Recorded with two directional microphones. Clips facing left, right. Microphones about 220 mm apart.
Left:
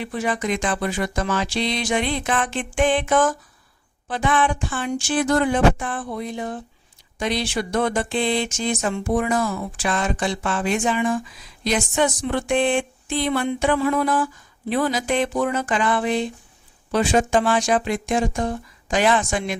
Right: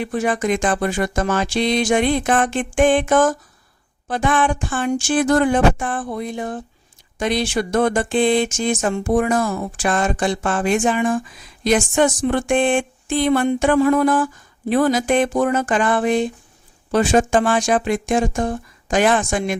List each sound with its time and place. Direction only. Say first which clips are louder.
0.0 s speech: right 4 dB; 50° right (ahead or behind)